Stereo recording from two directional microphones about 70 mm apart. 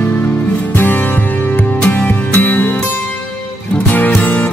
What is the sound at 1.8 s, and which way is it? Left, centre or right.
Music, centre.